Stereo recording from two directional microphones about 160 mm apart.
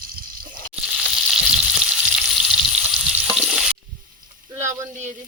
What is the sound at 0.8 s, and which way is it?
Frying, centre (ahead or behind).